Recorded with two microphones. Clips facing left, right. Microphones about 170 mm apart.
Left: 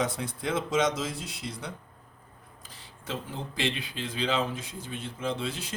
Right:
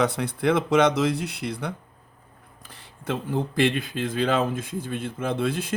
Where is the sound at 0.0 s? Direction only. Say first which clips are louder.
Right 8 dB; 70° right (ahead or behind).